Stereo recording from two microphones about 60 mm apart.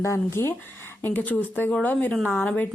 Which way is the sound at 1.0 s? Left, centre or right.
Left.